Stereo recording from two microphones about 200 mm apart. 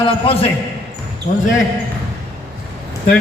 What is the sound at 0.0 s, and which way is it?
Speech, 30° left (ahead or behind).